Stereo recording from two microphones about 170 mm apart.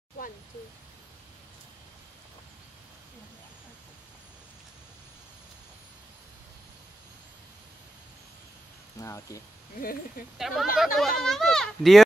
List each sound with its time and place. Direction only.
9.0 s speech: 15° left (ahead or behind)
9.8 s speech: 60° left (ahead or behind)
10.3 s speech: centre (ahead or behind)